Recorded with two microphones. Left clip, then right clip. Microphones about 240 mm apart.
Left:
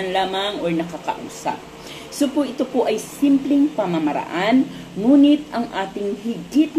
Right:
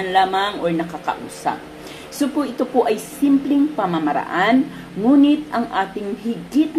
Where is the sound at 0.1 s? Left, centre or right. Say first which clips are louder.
Right 6 dB; centre.